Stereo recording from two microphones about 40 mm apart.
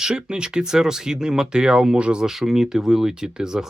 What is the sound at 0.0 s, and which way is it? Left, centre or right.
Speech, centre.